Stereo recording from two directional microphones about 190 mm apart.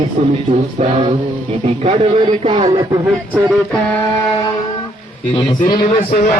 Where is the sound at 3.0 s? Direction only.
5° right (ahead or behind).